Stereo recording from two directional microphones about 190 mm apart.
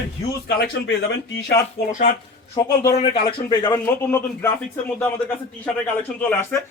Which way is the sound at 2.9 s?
25° left (ahead or behind).